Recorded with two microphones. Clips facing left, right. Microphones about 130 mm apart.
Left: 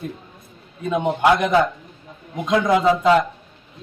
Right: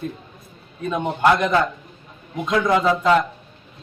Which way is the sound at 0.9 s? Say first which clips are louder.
Left 1 dB; 15° left (ahead or behind).